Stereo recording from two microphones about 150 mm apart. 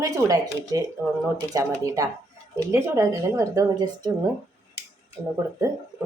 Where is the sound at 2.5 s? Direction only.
20° right (ahead or behind).